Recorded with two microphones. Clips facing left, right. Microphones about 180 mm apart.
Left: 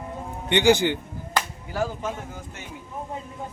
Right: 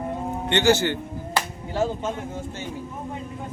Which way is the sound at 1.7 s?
25° right (ahead or behind).